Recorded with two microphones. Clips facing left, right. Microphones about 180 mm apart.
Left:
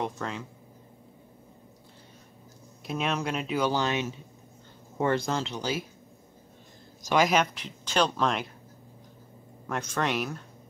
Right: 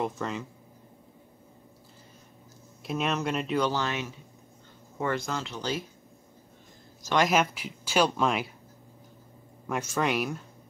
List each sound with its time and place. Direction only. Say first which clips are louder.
0.0 s speech: right 2 dB; 5° right (ahead or behind)
2.9 s speech: right 1 dB; centre (ahead or behind)
3.8 s speech: left 3 dB; 20° left (ahead or behind)
4.9 s speech: left 4 dB; 30° left (ahead or behind)
5.5 s speech: left 1 dB; 10° left (ahead or behind)
7.2 s speech: left 1 dB; centre (ahead or behind)
9.7 s speech: right 1 dB; 5° right (ahead or behind)